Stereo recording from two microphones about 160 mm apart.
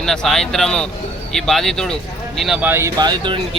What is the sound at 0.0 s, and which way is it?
Speech, 5° left (ahead or behind).